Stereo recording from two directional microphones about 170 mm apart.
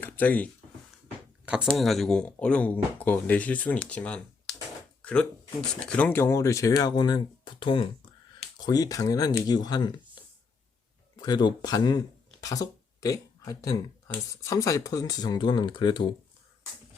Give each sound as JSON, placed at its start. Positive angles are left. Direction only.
{"t": 0.0, "sound": "speech", "side_deg": 10}
{"t": 1.7, "sound": "speech", "side_deg": 0}
{"t": 5.8, "sound": "speech", "side_deg": 10}
{"t": 11.2, "sound": "speech", "side_deg": 25}